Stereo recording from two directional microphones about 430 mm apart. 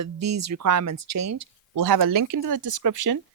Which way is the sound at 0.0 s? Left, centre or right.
Right.